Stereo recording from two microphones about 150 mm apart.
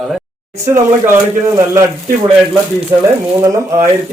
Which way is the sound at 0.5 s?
20° right (ahead or behind).